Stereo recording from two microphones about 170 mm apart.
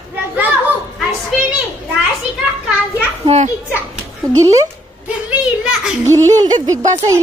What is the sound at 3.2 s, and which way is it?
Speech, 40° right (ahead or behind).